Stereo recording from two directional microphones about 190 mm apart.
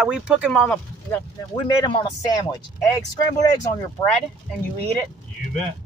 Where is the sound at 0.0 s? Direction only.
5° right (ahead or behind).